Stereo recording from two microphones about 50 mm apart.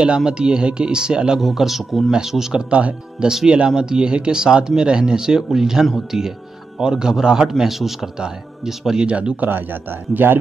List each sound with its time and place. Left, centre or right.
0.0 s speech: centre
1.4 s speech: centre
2.7 s speech: right
3.3 s speech: centre
9.0 s speech: right
9.4 s a man's voice: right